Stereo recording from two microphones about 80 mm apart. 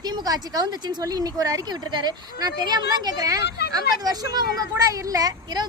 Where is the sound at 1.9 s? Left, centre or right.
Right.